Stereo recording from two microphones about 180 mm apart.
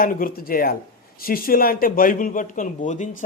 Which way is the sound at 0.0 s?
50° left (ahead or behind).